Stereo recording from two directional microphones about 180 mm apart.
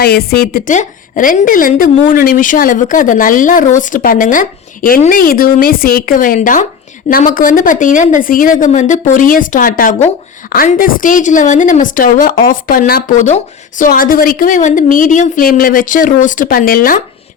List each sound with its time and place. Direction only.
0.0 s a woman's voice: 60° left (ahead or behind)